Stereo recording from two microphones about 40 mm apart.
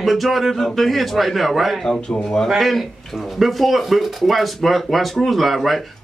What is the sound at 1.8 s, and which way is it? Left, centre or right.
Speech, centre.